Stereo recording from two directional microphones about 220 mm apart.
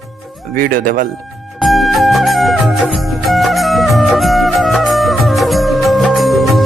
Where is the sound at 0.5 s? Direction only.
40° right (ahead or behind).